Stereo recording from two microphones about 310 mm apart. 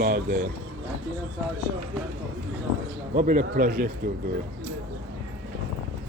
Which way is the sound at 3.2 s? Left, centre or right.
Right.